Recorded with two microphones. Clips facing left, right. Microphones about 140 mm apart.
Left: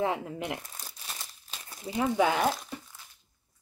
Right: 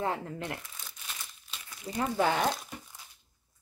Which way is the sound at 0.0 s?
15° left (ahead or behind).